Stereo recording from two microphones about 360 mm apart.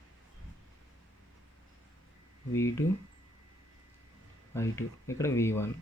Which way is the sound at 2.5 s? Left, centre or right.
Centre.